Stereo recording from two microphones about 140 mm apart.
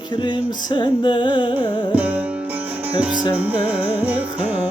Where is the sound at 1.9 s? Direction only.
10° right (ahead or behind).